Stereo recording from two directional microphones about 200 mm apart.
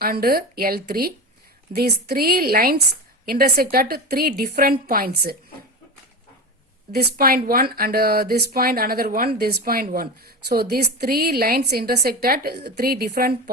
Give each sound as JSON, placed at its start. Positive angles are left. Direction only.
{"t": 0.0, "sound": "a woman's voice", "side_deg": -50}
{"t": 6.9, "sound": "a woman's voice", "side_deg": -50}